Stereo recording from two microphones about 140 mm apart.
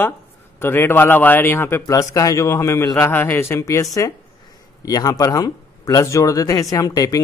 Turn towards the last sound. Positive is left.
turn(degrees=25)  # may be behind; listen again after turning